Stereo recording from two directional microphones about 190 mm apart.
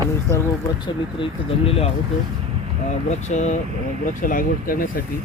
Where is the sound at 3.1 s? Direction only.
40° left (ahead or behind).